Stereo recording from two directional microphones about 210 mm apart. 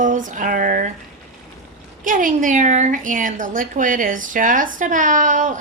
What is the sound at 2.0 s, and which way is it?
A woman's voice, 40° right (ahead or behind).